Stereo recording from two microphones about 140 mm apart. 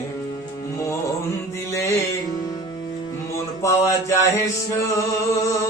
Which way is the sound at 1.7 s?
20° left (ahead or behind).